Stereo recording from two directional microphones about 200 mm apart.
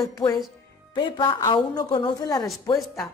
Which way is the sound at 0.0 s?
20° left (ahead or behind).